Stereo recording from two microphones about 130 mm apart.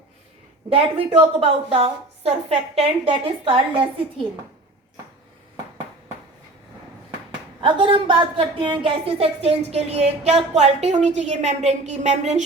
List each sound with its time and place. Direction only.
0.7 s a woman's voice: 50° right (ahead or behind)
7.6 s a woman's voice: 40° right (ahead or behind); by 12.5 s 60° right (ahead or behind)